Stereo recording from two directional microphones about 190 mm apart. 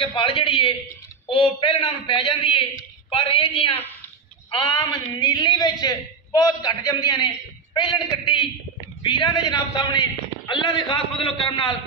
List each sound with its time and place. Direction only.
0.0 s a man's voice: 25° left (ahead or behind)